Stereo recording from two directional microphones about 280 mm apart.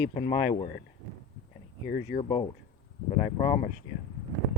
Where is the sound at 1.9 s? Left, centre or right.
Left.